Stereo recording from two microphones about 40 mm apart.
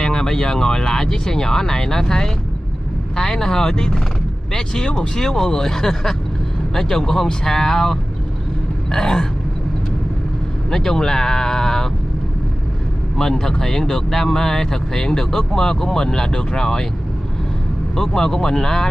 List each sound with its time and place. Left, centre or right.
0.0 s speech: centre
10.7 s speech: centre
13.2 s speech: centre
17.9 s speech: centre